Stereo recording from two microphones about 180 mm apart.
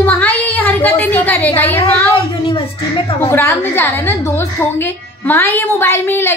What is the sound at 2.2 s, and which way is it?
Speech, 30° left (ahead or behind).